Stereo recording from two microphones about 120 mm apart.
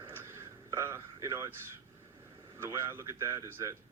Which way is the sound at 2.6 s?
20° right (ahead or behind).